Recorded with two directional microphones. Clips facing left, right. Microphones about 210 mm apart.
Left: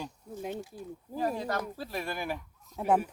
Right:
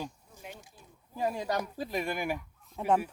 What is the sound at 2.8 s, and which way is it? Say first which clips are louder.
Speech: left 1 dB; 5° left (ahead or behind).